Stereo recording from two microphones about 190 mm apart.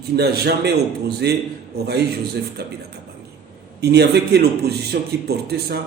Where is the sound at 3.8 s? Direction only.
60° right (ahead or behind).